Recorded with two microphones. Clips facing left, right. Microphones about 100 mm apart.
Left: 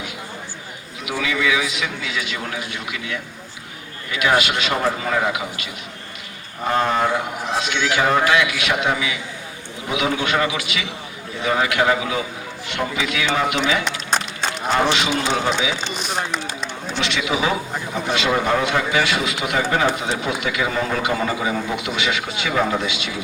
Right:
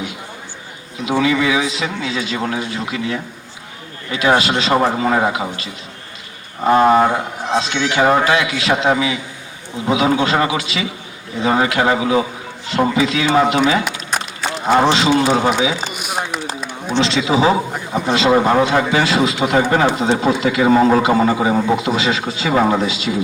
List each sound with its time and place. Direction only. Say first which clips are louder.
1.0 s a man's voice: right 6 dB; 30° right (ahead or behind)
15.9 s a sound: right 1 dB; 10° right (ahead or behind)
16.9 s a man's voice: right 7 dB; 30° right (ahead or behind)
19.6 s speech: right 4 dB; 45° right (ahead or behind)
20.0 s speech: right 8 dB; 30° right (ahead or behind)